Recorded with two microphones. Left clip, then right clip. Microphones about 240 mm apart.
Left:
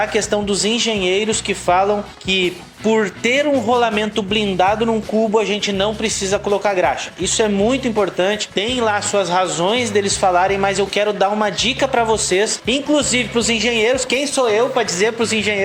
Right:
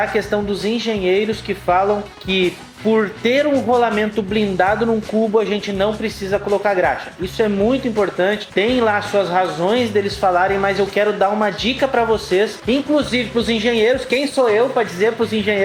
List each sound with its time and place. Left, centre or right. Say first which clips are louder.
0.0 s speech: left 1 dB; left